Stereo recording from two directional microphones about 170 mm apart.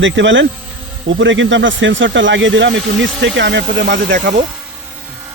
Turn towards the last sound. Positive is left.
turn(degrees=-50)  # may be behind; listen again after turning